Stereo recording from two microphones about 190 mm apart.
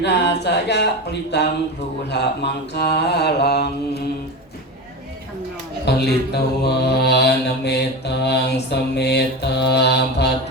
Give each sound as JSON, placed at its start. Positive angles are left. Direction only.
{"t": 0.0, "sound": "mantra", "side_deg": 65}
{"t": 5.9, "sound": "a man's voice", "side_deg": 60}
{"t": 6.3, "sound": "mantra", "side_deg": 60}